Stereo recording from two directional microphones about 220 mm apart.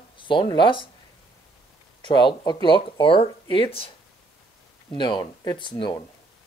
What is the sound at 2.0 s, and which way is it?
Speech, 20° left (ahead or behind).